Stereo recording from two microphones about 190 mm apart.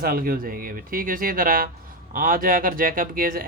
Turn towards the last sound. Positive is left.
turn(degrees=-50)  # may be behind; listen again after turning